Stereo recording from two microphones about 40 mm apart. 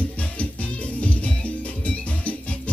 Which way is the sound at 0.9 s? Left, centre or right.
Left.